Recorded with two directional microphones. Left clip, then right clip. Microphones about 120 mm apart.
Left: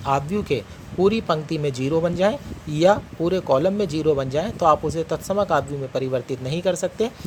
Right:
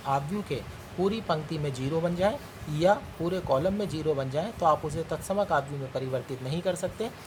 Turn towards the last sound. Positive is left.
turn(degrees=50)  # may be behind; listen again after turning